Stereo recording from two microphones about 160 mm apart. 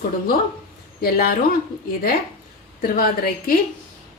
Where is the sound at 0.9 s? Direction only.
70° left (ahead or behind).